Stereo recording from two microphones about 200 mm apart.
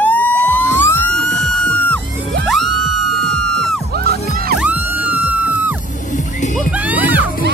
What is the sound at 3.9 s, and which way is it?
Music, 50° right (ahead or behind).